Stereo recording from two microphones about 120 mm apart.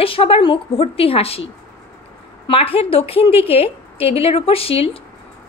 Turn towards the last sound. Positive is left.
turn(degrees=50)  # may be behind; listen again after turning